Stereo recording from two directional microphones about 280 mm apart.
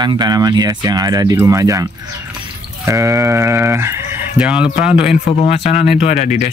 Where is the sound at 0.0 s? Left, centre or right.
Centre.